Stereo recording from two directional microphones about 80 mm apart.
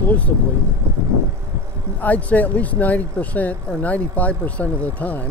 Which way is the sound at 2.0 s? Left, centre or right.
Centre.